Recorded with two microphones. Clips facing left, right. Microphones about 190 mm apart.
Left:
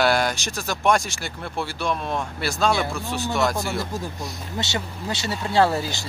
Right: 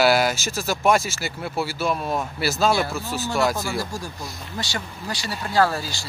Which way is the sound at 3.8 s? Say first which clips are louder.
Left 2 dB; 20° left (ahead or behind).